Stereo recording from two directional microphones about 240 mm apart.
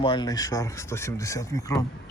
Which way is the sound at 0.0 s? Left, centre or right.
Centre.